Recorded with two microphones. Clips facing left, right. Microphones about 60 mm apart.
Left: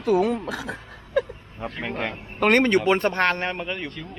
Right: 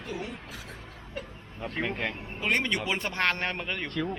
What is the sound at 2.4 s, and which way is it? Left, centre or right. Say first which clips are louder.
Speech: left 10 dB; left.